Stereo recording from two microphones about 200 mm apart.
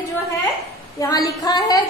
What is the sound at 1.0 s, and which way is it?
Speech, 15° left (ahead or behind).